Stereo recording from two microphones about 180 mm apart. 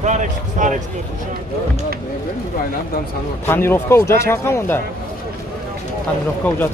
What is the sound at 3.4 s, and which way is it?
A man's voice, 10° left (ahead or behind).